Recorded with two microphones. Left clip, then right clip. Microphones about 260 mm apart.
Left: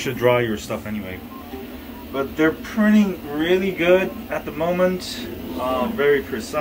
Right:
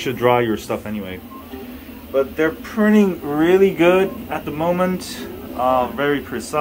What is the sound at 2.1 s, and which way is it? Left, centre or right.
Speech, centre.